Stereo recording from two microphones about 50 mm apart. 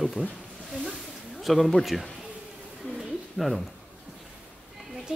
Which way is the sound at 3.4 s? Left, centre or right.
Centre.